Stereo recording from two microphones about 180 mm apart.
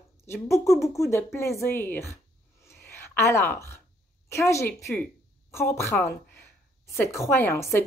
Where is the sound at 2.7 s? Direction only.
15° left (ahead or behind).